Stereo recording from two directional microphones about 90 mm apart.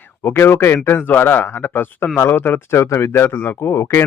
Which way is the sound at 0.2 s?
25° left (ahead or behind).